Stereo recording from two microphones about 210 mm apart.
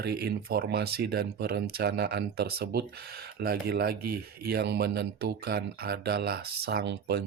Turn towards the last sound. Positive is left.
turn(degrees=-50)  # may be behind; listen again after turning